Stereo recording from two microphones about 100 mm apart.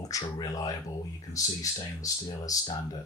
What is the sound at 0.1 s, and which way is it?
Speech, 40° left (ahead or behind).